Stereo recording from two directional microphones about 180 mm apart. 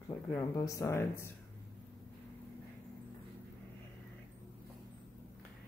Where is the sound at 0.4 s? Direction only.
20° left (ahead or behind).